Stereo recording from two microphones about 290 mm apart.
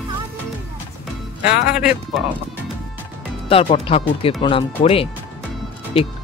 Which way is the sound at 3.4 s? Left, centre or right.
Left.